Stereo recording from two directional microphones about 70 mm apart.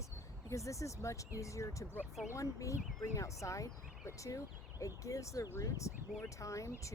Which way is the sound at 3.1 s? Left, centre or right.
Left.